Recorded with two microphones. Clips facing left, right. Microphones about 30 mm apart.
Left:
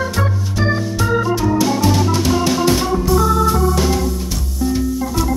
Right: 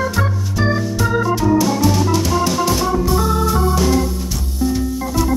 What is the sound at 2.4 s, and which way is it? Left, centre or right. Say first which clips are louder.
Music: left 1 dB; left.